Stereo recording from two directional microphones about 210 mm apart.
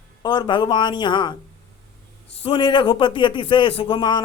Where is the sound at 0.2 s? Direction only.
20° left (ahead or behind).